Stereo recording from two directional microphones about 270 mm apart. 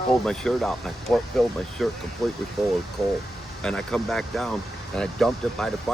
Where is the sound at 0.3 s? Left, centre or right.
Centre.